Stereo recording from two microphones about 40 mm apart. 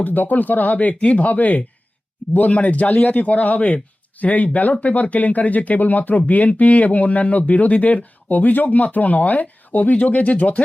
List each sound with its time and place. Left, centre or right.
0.0 s speech: left